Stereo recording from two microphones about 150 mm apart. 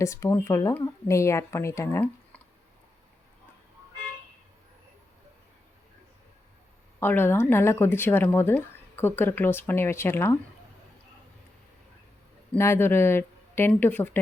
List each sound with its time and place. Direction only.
0.0 s speech: 20° left (ahead or behind)
7.0 s speech: 15° left (ahead or behind)
12.5 s speech: 15° left (ahead or behind)